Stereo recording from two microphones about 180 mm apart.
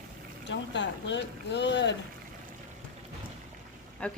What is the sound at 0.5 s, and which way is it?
Speech, 85° left.